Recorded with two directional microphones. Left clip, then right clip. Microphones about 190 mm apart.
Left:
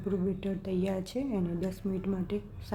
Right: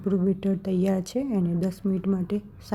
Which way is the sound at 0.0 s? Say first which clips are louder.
Right 7 dB; 25° right (ahead or behind).